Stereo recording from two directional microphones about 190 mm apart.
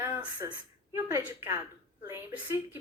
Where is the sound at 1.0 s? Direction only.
15° right (ahead or behind).